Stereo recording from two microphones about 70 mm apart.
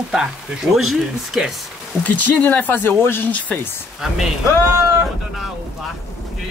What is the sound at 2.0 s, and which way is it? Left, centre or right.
Speech, left.